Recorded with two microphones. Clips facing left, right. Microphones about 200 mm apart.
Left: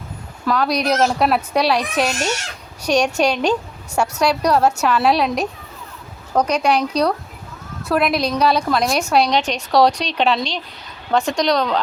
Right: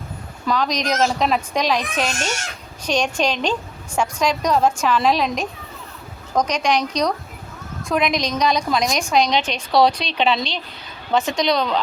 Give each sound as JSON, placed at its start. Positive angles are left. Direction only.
{"t": 0.4, "sound": "a woman's voice", "side_deg": 5}
{"t": 6.5, "sound": "a woman's voice", "side_deg": 5}
{"t": 9.3, "sound": "a woman's voice", "side_deg": 40}
{"t": 11.5, "sound": "speech", "side_deg": -5}